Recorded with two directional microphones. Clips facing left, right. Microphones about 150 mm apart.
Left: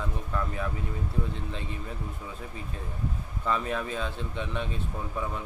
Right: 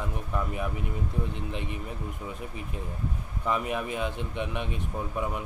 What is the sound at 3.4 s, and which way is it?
Speech, 15° right (ahead or behind).